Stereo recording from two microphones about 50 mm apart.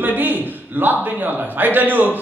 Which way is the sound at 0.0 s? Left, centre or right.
Right.